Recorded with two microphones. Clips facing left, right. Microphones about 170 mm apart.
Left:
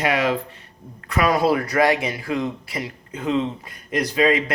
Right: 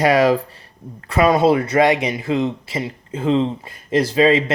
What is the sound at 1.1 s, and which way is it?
Speech, 25° right (ahead or behind).